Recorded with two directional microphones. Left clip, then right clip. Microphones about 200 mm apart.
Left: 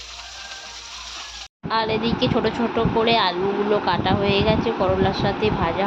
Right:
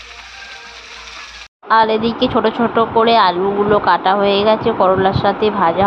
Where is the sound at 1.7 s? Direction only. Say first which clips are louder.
Right 9 dB; 25° right (ahead or behind).